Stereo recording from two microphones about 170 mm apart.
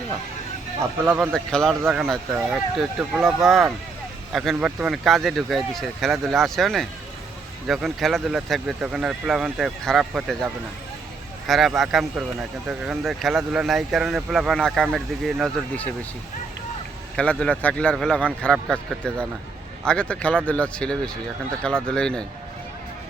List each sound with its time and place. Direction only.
1.0 s speech: 5° right (ahead or behind)
11.4 s speech: centre (ahead or behind)
17.2 s a man's voice: 5° left (ahead or behind)